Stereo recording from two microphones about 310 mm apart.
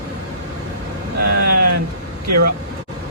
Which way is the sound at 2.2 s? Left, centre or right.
Right.